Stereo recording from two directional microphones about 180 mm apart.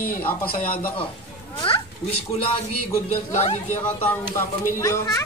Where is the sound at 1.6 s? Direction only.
30° left (ahead or behind).